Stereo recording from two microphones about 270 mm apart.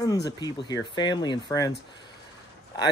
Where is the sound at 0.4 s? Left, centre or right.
Centre.